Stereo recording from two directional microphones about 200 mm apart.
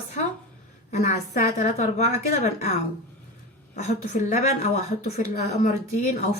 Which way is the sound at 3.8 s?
35° left (ahead or behind).